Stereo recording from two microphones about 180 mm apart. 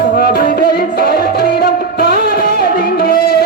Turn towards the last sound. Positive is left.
turn(degrees=55)  # may be behind; listen again after turning